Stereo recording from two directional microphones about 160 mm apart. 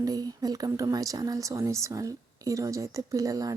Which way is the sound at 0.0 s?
25° right (ahead or behind).